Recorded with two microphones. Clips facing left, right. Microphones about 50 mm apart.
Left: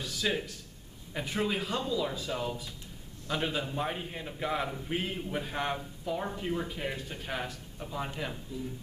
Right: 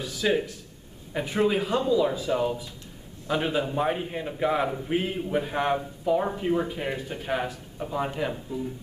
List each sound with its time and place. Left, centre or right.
0.0 s a man's voice: centre